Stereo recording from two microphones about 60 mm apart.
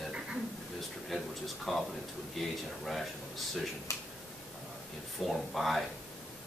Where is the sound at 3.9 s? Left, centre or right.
Left.